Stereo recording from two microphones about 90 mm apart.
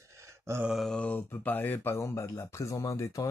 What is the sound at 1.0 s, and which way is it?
Speech, 20° left (ahead or behind).